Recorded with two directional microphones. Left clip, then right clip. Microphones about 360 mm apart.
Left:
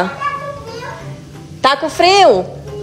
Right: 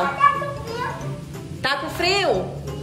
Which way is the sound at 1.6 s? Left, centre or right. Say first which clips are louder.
Left 11 dB; centre.